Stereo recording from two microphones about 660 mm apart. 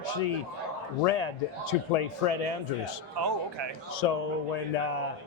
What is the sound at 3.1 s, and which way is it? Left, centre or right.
Speech, right.